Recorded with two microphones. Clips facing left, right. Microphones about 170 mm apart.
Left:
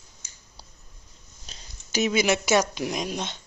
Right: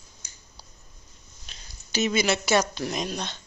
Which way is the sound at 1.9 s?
15° left (ahead or behind).